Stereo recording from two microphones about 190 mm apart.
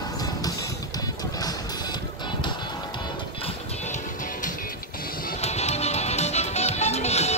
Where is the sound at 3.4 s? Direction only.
40° left (ahead or behind).